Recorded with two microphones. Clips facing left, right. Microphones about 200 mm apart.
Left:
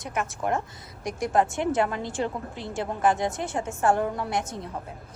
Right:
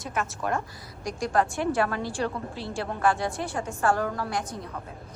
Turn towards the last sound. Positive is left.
turn(degrees=25)  # may be behind; listen again after turning